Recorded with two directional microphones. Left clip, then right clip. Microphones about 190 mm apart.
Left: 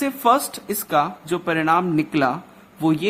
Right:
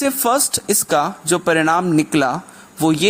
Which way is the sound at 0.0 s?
30° right (ahead or behind).